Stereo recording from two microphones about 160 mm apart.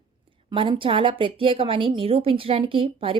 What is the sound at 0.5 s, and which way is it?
A woman's voice, 30° right (ahead or behind).